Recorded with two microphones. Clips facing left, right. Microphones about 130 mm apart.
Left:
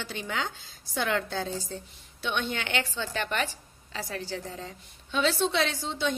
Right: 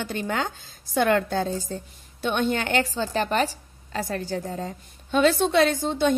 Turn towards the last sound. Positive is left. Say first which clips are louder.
# right 8 dB
turn(degrees=-50)  # may be behind; listen again after turning